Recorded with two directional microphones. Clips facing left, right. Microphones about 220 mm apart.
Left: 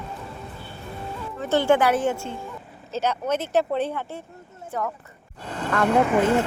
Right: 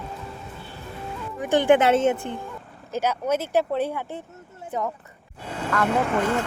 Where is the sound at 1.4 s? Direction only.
15° right (ahead or behind).